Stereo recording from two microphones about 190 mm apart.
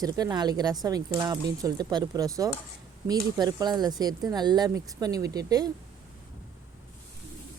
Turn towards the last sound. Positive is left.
turn(degrees=-20)  # may be behind; listen again after turning